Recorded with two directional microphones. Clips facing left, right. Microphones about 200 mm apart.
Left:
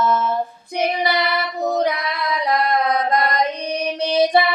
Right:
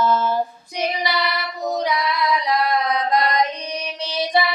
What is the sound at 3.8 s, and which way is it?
Music, 50° left (ahead or behind).